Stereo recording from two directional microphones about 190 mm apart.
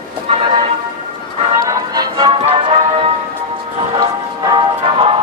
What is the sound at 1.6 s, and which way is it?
Music, 20° right (ahead or behind).